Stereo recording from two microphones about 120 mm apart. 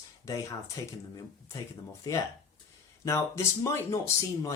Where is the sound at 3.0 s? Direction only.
25° left (ahead or behind).